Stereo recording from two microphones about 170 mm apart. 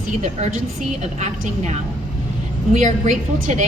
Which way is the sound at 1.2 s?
45° right (ahead or behind).